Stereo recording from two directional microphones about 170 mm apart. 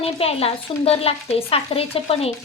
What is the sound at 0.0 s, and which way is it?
A woman's voice, 35° left (ahead or behind).